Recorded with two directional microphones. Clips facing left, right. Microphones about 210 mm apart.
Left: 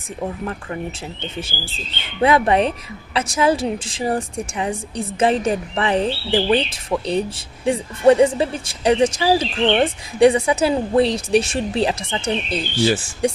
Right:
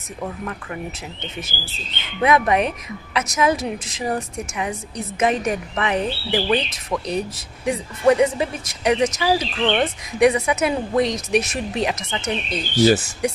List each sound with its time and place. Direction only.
0.2 s speech: 30° left (ahead or behind)